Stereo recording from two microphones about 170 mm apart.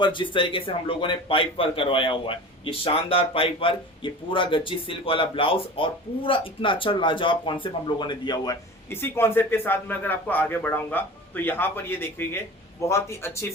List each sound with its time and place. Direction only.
0.0 s speech: 30° left (ahead or behind)
8.9 s a man's voice: 15° left (ahead or behind)